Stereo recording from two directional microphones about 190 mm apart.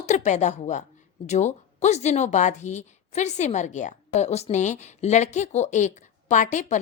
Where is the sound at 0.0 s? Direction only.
40° left (ahead or behind).